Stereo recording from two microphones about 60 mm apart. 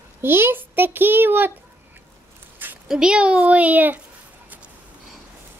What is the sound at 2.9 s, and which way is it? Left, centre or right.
A child's voice, centre.